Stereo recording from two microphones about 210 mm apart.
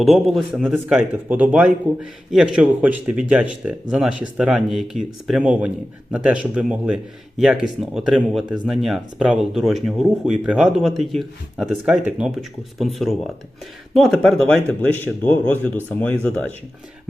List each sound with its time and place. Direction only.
0.0 s speech: centre (ahead or behind)